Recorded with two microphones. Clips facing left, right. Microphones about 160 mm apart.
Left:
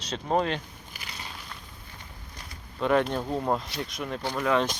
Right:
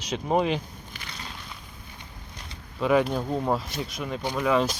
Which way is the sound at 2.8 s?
5° right (ahead or behind).